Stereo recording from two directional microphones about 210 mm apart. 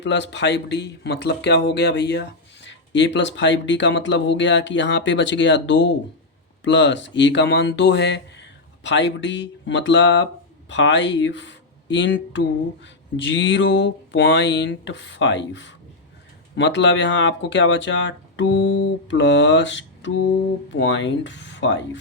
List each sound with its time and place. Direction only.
0.0 s speech: 60° left (ahead or behind)